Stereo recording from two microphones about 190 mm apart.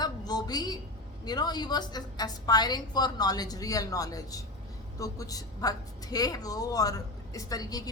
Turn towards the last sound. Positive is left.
turn(degrees=20)  # may be behind; listen again after turning